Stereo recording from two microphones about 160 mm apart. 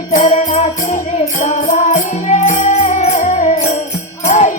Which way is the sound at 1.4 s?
50° left (ahead or behind).